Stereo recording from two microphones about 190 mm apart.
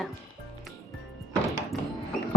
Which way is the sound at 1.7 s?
Centre (ahead or behind).